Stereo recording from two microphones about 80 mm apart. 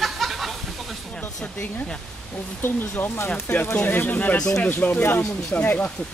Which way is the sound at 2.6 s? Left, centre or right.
Left.